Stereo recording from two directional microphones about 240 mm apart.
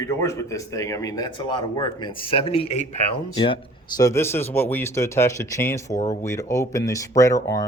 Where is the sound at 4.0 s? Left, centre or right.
Centre.